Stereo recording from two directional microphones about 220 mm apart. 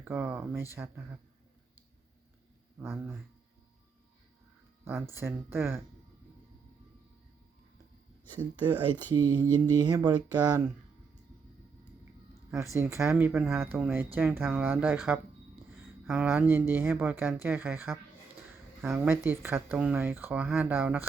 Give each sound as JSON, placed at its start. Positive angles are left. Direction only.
{"t": 0.0, "sound": "speech", "side_deg": -10}
{"t": 2.7, "sound": "speech", "side_deg": -10}
{"t": 4.9, "sound": "speech", "side_deg": -10}
{"t": 8.8, "sound": "speech", "side_deg": -20}
{"t": 12.5, "sound": "speech", "side_deg": -10}